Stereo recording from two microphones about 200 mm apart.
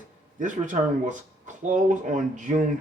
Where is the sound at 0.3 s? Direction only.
40° right (ahead or behind).